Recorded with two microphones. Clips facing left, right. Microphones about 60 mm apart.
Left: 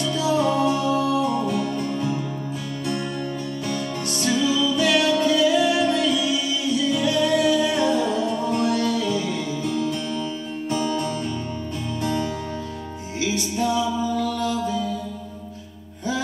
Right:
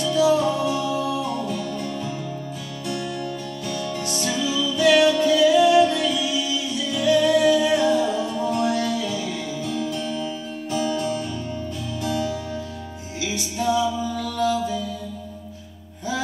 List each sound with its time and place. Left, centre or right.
0.2 s music: centre
0.6 s music: left
1.0 s music: centre
3.7 s music: centre
13.6 s music: centre
14.4 s mantra: centre